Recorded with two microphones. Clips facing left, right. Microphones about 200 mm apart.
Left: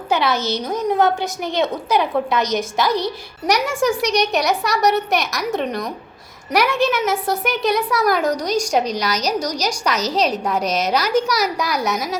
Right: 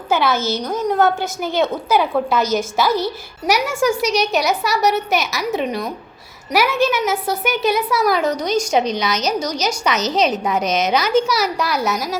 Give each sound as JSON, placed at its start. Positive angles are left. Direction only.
{"t": 0.1, "sound": "a woman's voice", "side_deg": 0}
{"t": 8.8, "sound": "a woman's voice", "side_deg": 35}
{"t": 9.6, "sound": "a woman's voice", "side_deg": -5}
{"t": 10.6, "sound": "a woman's voice", "side_deg": 35}
{"t": 11.3, "sound": "a woman's voice", "side_deg": -5}